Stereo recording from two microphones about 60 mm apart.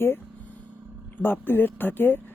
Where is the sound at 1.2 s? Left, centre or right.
Left.